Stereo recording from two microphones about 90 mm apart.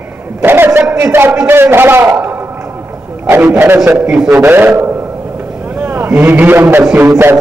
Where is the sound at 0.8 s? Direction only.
10° right (ahead or behind).